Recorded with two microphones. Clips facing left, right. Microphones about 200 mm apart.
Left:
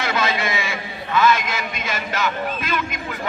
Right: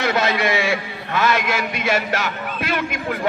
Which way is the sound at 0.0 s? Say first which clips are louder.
Right 3 dB; 65° right (ahead or behind).